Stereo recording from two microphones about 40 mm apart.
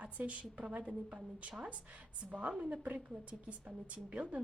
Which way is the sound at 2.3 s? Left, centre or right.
Right.